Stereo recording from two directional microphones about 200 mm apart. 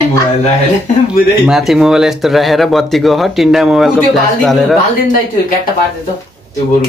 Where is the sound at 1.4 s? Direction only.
Centre (ahead or behind).